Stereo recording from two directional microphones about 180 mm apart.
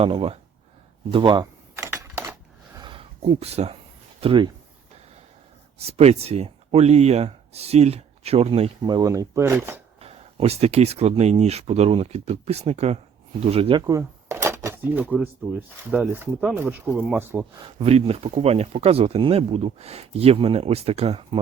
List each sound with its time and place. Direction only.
0.0 s speech: 30° right (ahead or behind)
1.7 s keys jangling: 15° right (ahead or behind)
2.7 s a sound: 25° right (ahead or behind)
4.2 s speech: 30° right (ahead or behind)
5.8 s speech: 35° right (ahead or behind); by 9.8 s 10° right (ahead or behind)
10.0 s speech: 35° right (ahead or behind)
13.8 s speech: 15° right (ahead or behind)
17.6 s speech: 35° right (ahead or behind)